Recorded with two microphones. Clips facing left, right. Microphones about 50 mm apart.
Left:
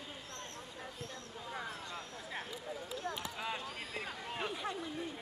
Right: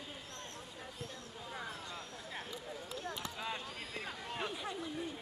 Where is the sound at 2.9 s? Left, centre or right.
Centre.